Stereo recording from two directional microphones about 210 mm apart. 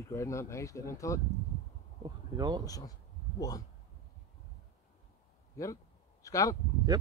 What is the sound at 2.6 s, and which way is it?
Speech, 15° left (ahead or behind).